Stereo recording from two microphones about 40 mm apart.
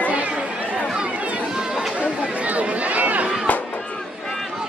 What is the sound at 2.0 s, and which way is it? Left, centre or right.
Chatter, right.